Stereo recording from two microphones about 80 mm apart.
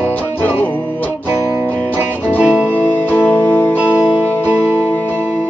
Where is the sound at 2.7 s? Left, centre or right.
Left.